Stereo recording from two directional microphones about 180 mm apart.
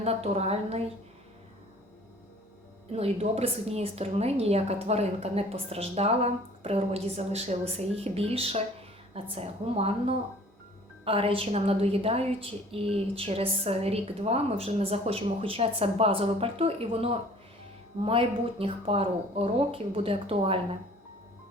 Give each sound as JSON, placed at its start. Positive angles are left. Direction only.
{"t": 0.0, "sound": "a woman's voice", "side_deg": -35}
{"t": 2.9, "sound": "a woman's voice", "side_deg": -35}